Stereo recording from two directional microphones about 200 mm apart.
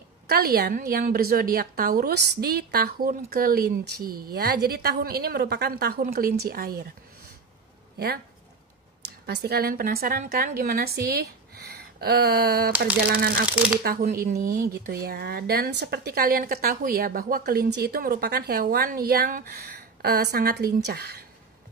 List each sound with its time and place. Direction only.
0.3 s speech: 50° right (ahead or behind)
9.2 s speech: 55° right (ahead or behind)